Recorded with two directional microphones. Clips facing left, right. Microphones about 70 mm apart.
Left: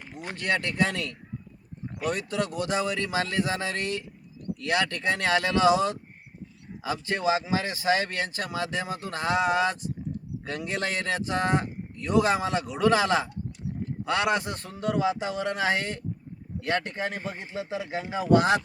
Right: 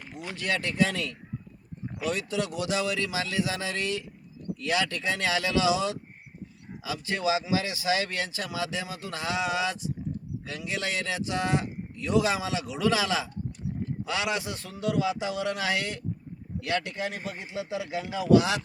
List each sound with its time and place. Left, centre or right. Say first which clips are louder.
0.2 s a man's voice: left 2 dB; left